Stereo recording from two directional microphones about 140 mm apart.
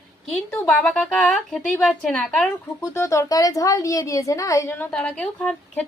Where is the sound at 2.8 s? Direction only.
20° left (ahead or behind).